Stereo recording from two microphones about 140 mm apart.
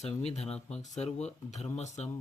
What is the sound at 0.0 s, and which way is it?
Speech, 50° left (ahead or behind).